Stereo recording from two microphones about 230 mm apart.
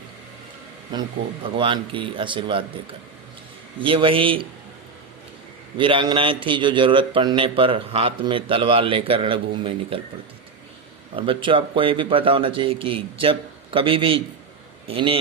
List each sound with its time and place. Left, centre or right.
0.9 s a man's voice: centre
3.8 s a man's voice: right
5.7 s a man's voice: right
11.1 s a man's voice: right